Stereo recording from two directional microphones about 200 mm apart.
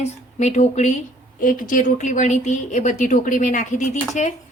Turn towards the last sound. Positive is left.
turn(degrees=40)  # may be behind; listen again after turning